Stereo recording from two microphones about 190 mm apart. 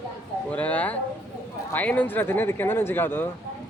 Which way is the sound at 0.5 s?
5° left (ahead or behind).